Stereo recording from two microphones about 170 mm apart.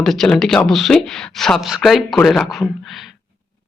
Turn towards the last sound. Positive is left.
turn(degrees=0)  # may be behind; listen again after turning